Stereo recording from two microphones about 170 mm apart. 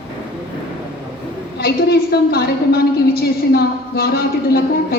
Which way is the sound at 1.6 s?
70° left (ahead or behind).